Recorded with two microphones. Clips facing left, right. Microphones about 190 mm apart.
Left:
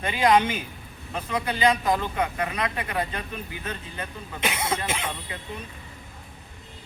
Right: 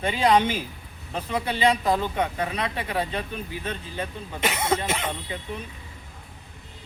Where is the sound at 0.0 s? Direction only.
30° right (ahead or behind).